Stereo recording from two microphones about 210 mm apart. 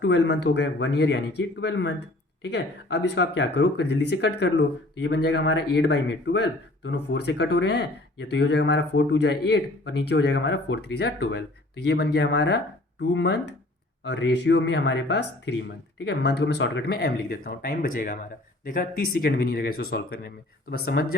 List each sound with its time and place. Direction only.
0.0 s speech: 60° left (ahead or behind)